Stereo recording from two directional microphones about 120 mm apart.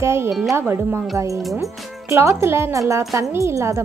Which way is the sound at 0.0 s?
20° right (ahead or behind).